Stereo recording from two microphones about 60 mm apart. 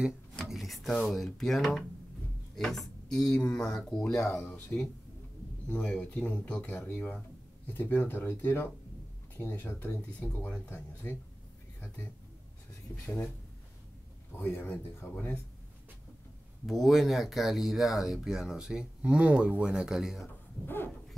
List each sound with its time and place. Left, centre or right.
0.5 s speech: centre
7.6 s speech: left
10.4 s speech: left
10.7 s speech: left
14.3 s speech: left
16.6 s speech: centre
20.6 s speech: left